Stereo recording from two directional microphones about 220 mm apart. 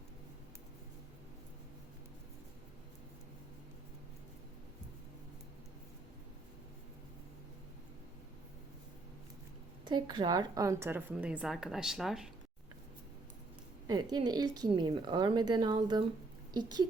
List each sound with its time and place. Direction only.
9.8 s speech: 20° right (ahead or behind); by 12.3 s centre (ahead or behind)
13.8 s a woman's voice: 20° right (ahead or behind)